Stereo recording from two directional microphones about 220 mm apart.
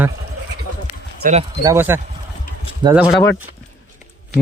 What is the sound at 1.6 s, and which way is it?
Speech, 10° right (ahead or behind).